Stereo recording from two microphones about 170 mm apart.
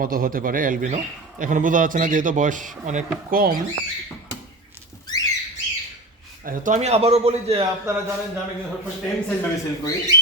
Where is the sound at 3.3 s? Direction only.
60° right (ahead or behind).